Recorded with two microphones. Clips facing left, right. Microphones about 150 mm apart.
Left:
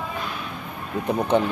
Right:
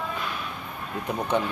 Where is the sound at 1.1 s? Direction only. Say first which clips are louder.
Left 5 dB; 25° left (ahead or behind).